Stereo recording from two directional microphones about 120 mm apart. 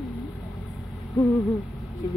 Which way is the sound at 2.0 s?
30° left (ahead or behind).